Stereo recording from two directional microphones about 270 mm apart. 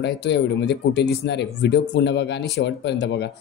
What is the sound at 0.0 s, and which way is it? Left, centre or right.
Speech, left.